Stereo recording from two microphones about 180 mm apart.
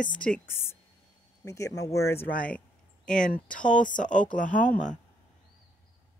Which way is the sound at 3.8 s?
45° left (ahead or behind).